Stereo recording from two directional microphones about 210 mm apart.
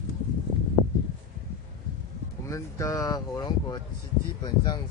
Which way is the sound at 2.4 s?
15° left (ahead or behind).